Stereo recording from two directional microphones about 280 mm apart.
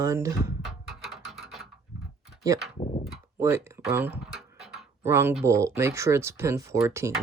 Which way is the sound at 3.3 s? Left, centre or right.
Centre.